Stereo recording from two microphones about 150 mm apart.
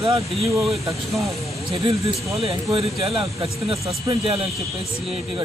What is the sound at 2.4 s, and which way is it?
Speech, 40° right (ahead or behind).